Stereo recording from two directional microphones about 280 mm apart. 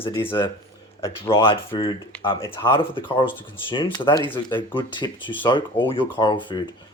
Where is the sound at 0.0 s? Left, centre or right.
Centre.